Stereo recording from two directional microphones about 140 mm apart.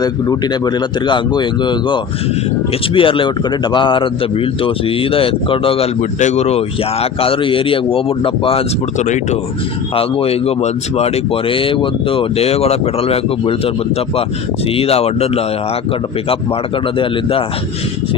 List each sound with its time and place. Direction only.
0.0 s speech: 30° left (ahead or behind)
9.0 s speech: 55° left (ahead or behind)
9.9 s speech: 40° left (ahead or behind)
14.8 s speech: 45° left (ahead or behind)
17.0 s speech: 40° left (ahead or behind)